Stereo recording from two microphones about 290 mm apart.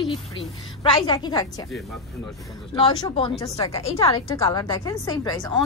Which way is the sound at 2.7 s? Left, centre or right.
Centre.